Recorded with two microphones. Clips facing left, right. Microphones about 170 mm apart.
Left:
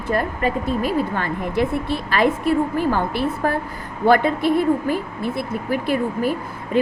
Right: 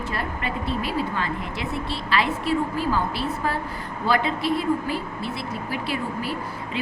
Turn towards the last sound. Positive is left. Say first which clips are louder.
# left 8 dB
turn(degrees=50)  # may be behind; listen again after turning